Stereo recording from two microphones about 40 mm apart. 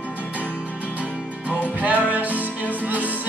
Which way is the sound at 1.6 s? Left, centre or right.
Right.